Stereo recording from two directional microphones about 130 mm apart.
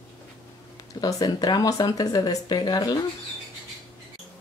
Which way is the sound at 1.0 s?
30° left (ahead or behind).